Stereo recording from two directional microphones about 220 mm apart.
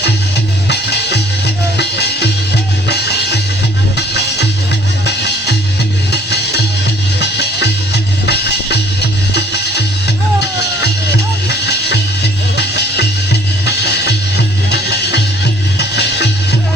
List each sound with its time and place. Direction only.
0.7 s music: 50° left (ahead or behind)
7.2 s music: 50° left (ahead or behind)
11.4 s music: 50° left (ahead or behind)